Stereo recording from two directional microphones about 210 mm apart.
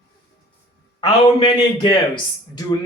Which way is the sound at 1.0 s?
25° left (ahead or behind).